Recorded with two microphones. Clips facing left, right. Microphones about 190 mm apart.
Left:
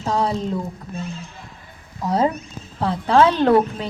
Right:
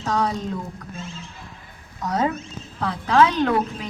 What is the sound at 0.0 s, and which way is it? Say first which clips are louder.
Speech: left 2 dB; 30° left (ahead or behind).